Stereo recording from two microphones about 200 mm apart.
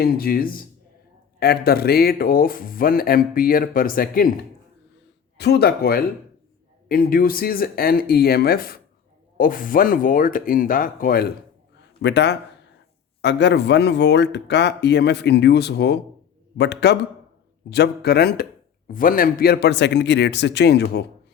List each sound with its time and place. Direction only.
0.0 s speech: 50° left (ahead or behind)
12.0 s speech: 60° left (ahead or behind)